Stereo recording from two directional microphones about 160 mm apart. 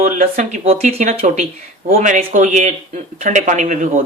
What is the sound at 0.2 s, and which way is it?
Speech, 45° right (ahead or behind).